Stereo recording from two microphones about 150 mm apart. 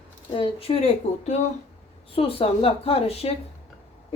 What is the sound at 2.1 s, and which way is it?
A woman's voice, 40° left (ahead or behind).